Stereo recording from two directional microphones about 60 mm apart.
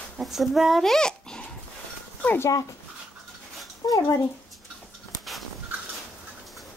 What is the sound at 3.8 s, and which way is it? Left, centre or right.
Speech, left.